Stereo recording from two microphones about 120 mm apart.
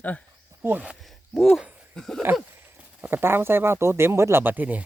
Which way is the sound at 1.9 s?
5° left (ahead or behind).